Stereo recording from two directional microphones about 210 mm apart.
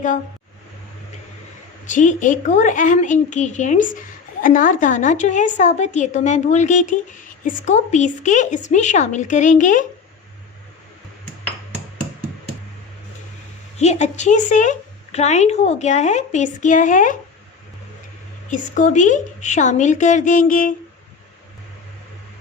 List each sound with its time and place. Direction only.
1.9 s a woman's voice: 35° left (ahead or behind)
13.7 s a woman's voice: 30° left (ahead or behind)
18.5 s a woman's voice: 35° left (ahead or behind)